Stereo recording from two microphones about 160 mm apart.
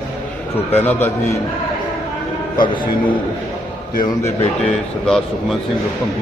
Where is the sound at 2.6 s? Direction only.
60° left (ahead or behind).